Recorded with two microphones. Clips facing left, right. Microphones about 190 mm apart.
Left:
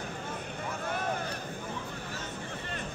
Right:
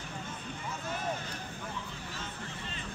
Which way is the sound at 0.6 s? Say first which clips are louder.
Left 4 dB; 55° left (ahead or behind).